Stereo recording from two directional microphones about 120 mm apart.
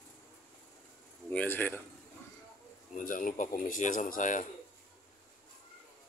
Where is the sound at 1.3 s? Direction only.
10° left (ahead or behind).